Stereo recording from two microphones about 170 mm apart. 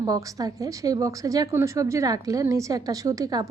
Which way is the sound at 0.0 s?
20° right (ahead or behind).